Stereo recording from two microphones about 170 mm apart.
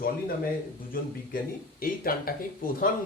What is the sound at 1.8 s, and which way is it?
Speech, 60° left (ahead or behind).